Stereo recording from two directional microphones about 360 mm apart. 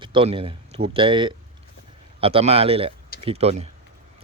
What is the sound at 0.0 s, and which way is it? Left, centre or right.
A man's voice, centre.